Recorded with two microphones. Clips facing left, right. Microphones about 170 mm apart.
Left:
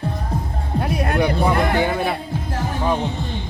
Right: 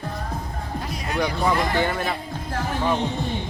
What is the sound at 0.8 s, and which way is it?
Music, 60° left (ahead or behind).